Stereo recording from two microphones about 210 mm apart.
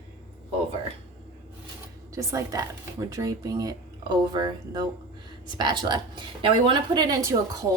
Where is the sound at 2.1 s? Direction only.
15° right (ahead or behind).